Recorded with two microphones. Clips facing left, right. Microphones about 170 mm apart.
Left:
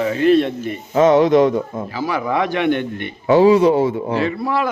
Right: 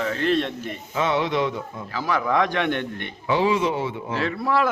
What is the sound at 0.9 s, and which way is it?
Speech, 45° left (ahead or behind).